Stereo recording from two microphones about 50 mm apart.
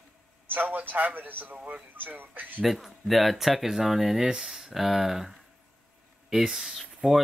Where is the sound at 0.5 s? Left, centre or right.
Right.